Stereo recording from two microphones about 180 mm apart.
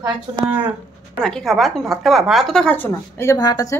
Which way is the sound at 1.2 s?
Centre (ahead or behind).